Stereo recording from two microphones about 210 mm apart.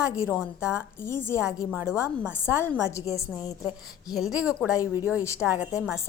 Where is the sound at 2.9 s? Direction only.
15° left (ahead or behind).